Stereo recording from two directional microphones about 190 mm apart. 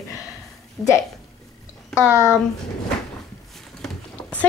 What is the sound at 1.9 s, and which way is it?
Speech, 15° left (ahead or behind).